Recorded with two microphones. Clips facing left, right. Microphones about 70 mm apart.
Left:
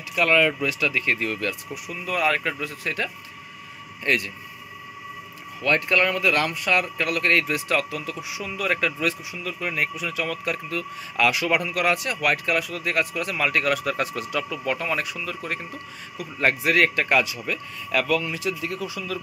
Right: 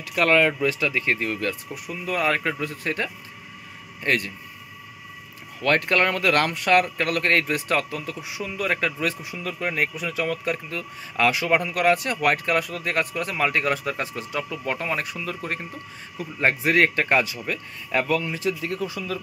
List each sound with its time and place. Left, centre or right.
0.1 s speech: right
5.6 s speech: right
7.0 s speech: right